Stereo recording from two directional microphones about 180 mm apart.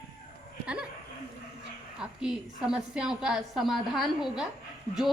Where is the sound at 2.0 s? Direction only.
5° right (ahead or behind).